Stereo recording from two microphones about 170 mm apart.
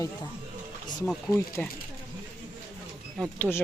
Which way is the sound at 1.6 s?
10° left (ahead or behind).